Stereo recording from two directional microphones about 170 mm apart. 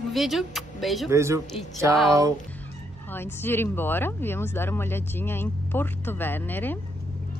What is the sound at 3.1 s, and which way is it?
Speech, 15° left (ahead or behind).